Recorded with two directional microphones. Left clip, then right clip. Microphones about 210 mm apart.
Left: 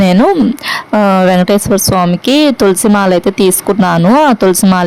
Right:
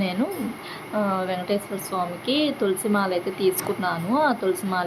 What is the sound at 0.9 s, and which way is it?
Speech, 50° left (ahead or behind).